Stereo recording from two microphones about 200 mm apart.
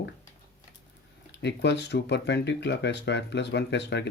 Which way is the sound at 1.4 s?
60° left (ahead or behind).